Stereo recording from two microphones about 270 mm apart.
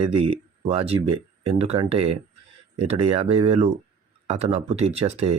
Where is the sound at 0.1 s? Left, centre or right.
Right.